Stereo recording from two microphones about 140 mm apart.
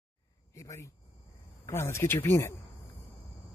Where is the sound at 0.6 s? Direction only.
20° left (ahead or behind).